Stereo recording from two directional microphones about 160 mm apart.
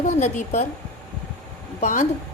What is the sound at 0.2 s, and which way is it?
Speech, 45° left (ahead or behind).